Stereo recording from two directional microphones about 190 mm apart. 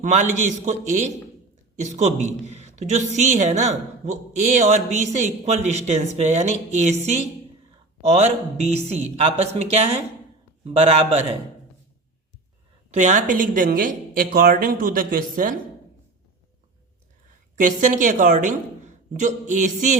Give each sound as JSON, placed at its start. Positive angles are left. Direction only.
{"t": 0.0, "sound": "speech", "side_deg": -40}
{"t": 2.6, "sound": "a sound", "side_deg": -40}
{"t": 3.4, "sound": "speech", "side_deg": -35}
{"t": 12.9, "sound": "a woman's voice", "side_deg": -40}
{"t": 17.6, "sound": "speech", "side_deg": -40}